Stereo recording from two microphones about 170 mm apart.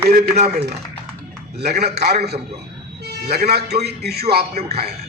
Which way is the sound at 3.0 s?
70° right (ahead or behind).